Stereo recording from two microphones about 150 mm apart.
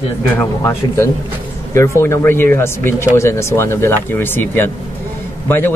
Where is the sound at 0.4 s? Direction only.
15° left (ahead or behind).